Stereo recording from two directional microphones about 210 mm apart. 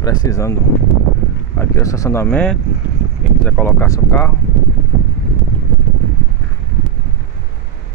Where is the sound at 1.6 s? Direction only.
15° left (ahead or behind).